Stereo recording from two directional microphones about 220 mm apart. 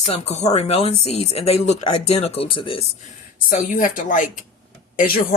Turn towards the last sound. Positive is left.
turn(degrees=40)  # may be behind; listen again after turning